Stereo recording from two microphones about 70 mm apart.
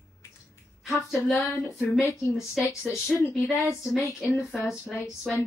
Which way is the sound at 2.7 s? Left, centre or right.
Left.